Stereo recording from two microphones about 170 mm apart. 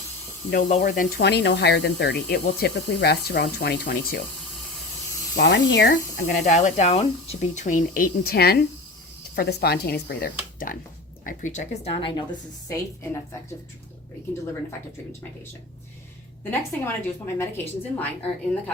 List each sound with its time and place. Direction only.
0.5 s speech: 45° left (ahead or behind)
1.2 s speech: 80° left
5.4 s a woman's voice: 90° left; by 12.2 s 30° left (ahead or behind)
12.6 s a woman's voice: 15° left (ahead or behind)
16.4 s a woman's voice: 10° left (ahead or behind)